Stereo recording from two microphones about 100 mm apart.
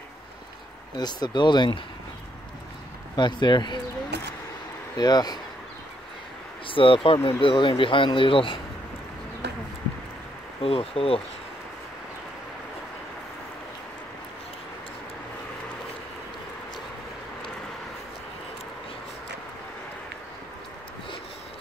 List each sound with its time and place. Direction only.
0.9 s speech: 45° left (ahead or behind)
3.2 s speech: 50° left (ahead or behind)
4.9 s speech: 40° left (ahead or behind)
6.7 s speech: 60° left (ahead or behind)
10.6 s speech: 75° left (ahead or behind)